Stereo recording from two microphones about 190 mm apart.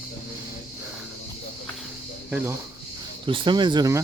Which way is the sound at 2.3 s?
5° right (ahead or behind).